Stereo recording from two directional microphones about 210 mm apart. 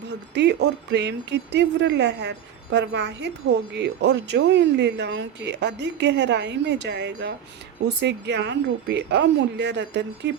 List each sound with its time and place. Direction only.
0.1 s speech: 55° right (ahead or behind)